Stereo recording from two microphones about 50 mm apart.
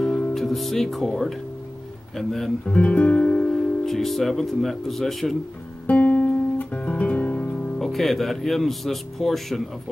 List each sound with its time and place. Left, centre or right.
0.3 s speech: centre
2.6 s speech: left; by 5.4 s centre
5.9 s guitar: left
7.4 s music: left
7.8 s speech: centre